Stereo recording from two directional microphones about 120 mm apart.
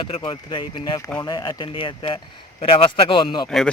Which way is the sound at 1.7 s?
50° left (ahead or behind).